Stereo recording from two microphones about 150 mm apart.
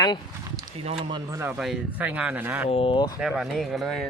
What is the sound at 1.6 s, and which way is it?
Speech, 5° right (ahead or behind).